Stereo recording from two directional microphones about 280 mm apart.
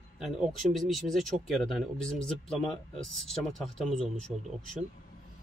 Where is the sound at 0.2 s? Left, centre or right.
Centre.